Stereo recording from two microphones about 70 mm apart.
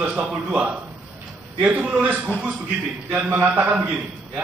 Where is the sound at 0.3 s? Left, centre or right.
Centre.